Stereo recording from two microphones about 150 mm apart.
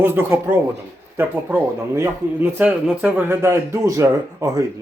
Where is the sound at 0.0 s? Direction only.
15° right (ahead or behind).